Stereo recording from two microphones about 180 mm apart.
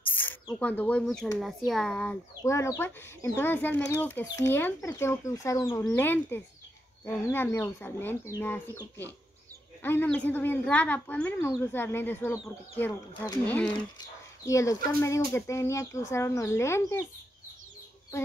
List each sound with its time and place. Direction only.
0.0 s bird: 10° left (ahead or behind)
0.5 s speech: 5° left (ahead or behind)
2.4 s speech: 15° left (ahead or behind)
13.1 s speech: 20° left (ahead or behind)